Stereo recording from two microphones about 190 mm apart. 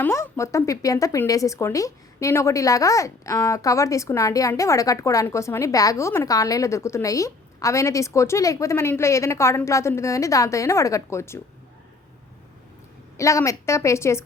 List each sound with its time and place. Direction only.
0.0 s a woman's voice: 15° left (ahead or behind)
13.1 s a woman's voice: 15° left (ahead or behind)